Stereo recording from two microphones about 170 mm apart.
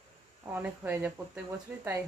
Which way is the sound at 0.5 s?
10° right (ahead or behind).